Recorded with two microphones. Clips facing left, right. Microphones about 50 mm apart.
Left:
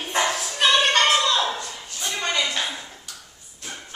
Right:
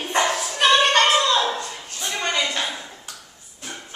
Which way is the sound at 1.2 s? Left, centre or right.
Centre.